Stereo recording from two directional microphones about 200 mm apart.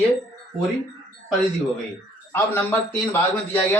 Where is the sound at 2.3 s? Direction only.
10° left (ahead or behind).